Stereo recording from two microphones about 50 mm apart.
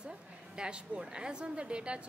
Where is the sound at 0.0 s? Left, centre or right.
Centre.